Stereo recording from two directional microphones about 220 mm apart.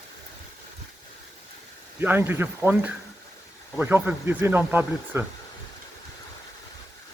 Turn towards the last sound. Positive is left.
turn(degrees=-10)  # may be behind; listen again after turning